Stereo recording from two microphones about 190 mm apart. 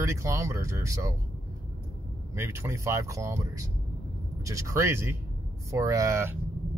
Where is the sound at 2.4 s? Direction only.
15° right (ahead or behind).